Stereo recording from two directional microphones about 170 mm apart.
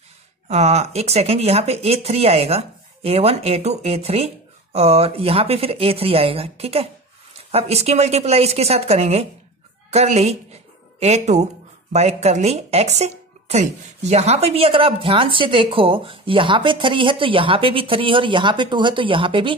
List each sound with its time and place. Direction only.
0.5 s speech: 40° right (ahead or behind)